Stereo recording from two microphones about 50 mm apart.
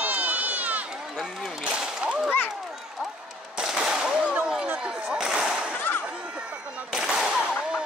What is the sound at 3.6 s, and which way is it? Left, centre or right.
Machine gun, centre.